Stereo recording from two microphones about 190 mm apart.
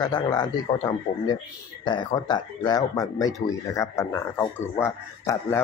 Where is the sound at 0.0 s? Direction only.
20° left (ahead or behind).